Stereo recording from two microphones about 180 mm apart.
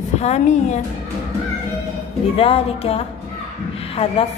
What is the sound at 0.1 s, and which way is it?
Speech, 40° left (ahead or behind).